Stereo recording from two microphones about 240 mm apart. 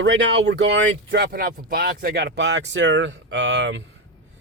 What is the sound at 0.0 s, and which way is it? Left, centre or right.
Speech, right.